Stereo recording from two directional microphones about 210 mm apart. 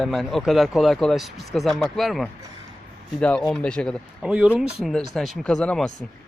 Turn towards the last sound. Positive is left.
turn(degrees=0)  # may be behind; listen again after turning